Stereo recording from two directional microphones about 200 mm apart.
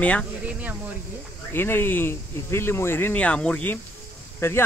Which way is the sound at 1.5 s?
10° left (ahead or behind).